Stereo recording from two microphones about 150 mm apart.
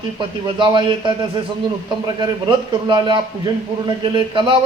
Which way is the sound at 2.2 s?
30° right (ahead or behind).